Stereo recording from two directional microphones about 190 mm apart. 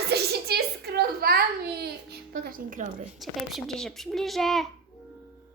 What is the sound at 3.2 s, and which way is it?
A child's voice, centre (ahead or behind).